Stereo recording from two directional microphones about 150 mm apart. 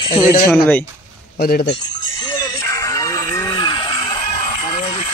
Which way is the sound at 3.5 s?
30° left (ahead or behind).